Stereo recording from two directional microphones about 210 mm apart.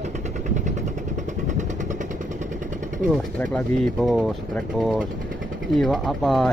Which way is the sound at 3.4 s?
5° left (ahead or behind).